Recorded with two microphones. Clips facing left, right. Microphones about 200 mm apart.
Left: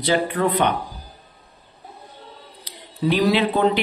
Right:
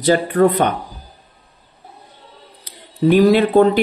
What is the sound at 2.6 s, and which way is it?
Speech, 50° right (ahead or behind).